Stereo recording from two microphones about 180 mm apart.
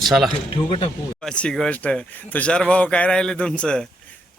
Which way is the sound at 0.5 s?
30° left (ahead or behind).